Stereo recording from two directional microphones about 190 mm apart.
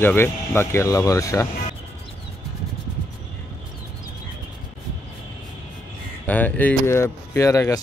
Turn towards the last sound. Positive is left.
turn(degrees=15)  # may be behind; listen again after turning